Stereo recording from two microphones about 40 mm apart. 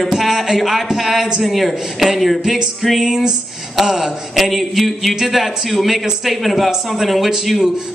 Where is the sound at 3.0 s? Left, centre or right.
Centre.